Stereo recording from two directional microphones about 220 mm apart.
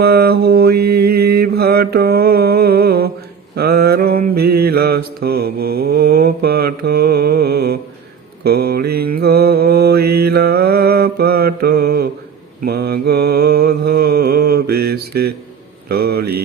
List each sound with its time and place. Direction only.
0.0 s mantra: 45° right (ahead or behind)